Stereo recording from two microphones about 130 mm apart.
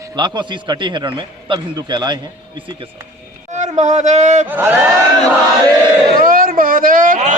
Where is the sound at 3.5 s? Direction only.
65° right (ahead or behind).